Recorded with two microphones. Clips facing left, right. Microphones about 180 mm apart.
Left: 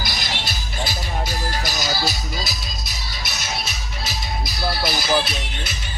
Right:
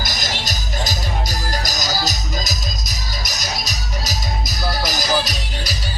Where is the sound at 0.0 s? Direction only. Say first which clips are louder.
Right 2 dB; 45° right (ahead or behind).